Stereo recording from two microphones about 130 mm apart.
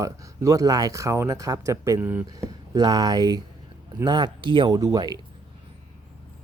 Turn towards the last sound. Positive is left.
turn(degrees=-30)  # may be behind; listen again after turning